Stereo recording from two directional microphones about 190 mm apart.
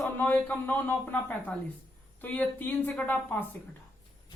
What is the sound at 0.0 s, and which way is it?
Speech, 10° left (ahead or behind).